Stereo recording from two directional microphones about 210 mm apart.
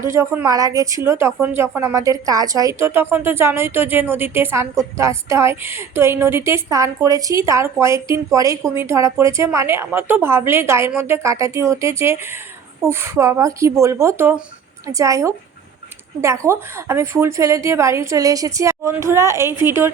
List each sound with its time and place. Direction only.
0.0 s speech: 10° right (ahead or behind)